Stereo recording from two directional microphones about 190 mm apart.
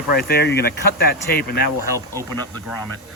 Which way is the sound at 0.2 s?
55° left (ahead or behind).